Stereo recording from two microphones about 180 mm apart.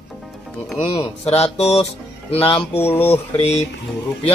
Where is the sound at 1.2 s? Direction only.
35° left (ahead or behind).